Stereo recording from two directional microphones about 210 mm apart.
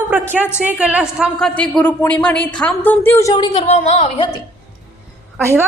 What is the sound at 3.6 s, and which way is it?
Speech, 30° left (ahead or behind).